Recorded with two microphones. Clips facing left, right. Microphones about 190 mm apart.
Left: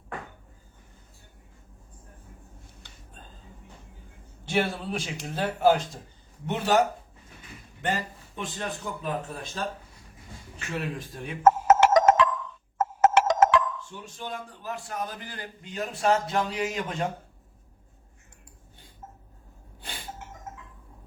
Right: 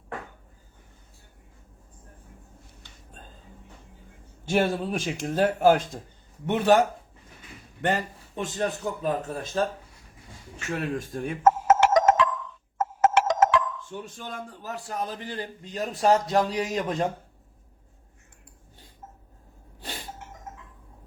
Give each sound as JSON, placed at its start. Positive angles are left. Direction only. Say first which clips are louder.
{"t": 4.4, "sound": "a man's voice", "louder": "right 3 dB", "side_deg": -50}
{"t": 10.8, "sound": "a man's voice", "louder": "right 3 dB", "side_deg": -45}
{"t": 11.8, "sound": "music", "louder": "left 1 dB", "side_deg": 85}
{"t": 13.9, "sound": "a man's voice", "louder": "right 1 dB", "side_deg": -55}